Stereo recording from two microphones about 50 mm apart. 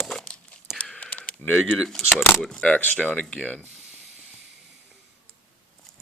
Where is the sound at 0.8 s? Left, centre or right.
Centre.